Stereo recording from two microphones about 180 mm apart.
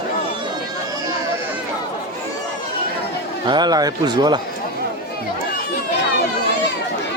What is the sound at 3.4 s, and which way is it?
Speech, 25° right (ahead or behind).